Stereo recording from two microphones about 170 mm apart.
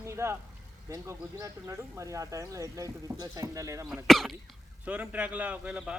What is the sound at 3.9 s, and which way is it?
Speech, centre (ahead or behind).